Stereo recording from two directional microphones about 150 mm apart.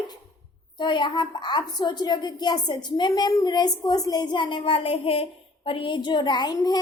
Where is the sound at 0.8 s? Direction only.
30° left (ahead or behind).